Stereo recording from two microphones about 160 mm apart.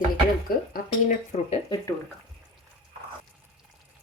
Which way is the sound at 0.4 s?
65° left (ahead or behind).